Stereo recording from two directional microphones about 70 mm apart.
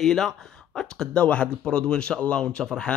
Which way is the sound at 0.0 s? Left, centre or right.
Centre.